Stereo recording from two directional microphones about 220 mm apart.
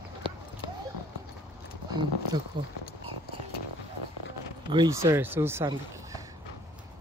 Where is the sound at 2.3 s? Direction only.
20° right (ahead or behind).